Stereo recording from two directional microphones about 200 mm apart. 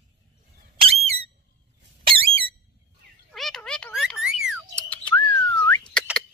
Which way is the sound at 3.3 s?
Centre (ahead or behind).